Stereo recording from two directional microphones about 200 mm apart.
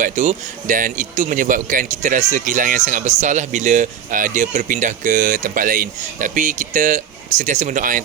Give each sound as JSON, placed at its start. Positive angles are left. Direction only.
{"t": 0.0, "sound": "a man's voice", "side_deg": -40}